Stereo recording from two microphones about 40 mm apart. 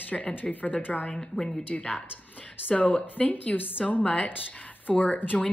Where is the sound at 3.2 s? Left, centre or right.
Left.